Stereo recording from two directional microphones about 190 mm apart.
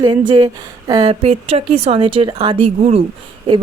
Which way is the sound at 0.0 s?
25° right (ahead or behind).